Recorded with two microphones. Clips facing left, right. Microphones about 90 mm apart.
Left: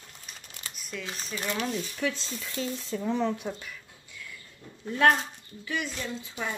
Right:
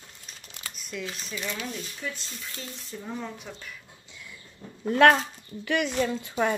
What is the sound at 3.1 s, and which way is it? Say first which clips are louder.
Speech: left 8 dB; 65° left (ahead or behind).